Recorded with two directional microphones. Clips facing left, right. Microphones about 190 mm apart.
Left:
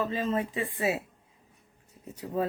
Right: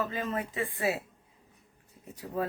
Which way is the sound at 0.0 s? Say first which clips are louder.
Left 4 dB; 30° left (ahead or behind).